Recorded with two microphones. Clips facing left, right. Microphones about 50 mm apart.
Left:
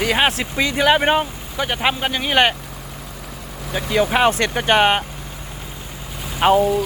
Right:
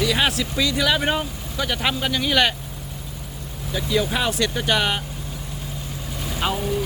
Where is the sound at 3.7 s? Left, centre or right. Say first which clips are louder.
Left 5 dB; left.